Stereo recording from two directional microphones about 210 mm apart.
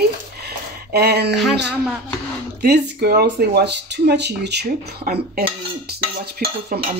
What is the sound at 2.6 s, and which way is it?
Speech, 50° right (ahead or behind).